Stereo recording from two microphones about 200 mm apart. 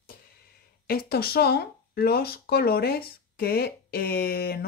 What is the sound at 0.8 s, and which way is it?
Speech, 50° left (ahead or behind).